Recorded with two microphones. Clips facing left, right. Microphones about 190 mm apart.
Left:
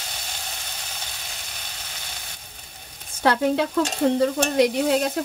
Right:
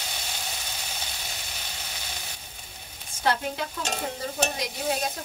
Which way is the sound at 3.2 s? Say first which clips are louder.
Left 7 dB; 70° left (ahead or behind).